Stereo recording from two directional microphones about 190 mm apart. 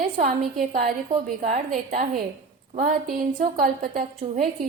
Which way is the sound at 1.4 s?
40° right (ahead or behind).